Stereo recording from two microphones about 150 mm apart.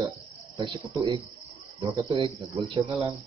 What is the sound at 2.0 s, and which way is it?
Speech, 35° right (ahead or behind).